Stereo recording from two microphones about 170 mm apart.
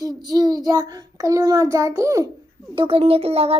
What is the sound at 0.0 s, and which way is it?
Child singing, 25° right (ahead or behind).